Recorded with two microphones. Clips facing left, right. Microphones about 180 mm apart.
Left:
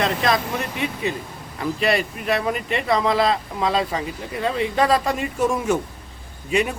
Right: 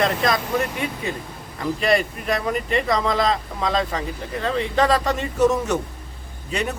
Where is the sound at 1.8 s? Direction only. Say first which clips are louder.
Right 1 dB; 5° left (ahead or behind).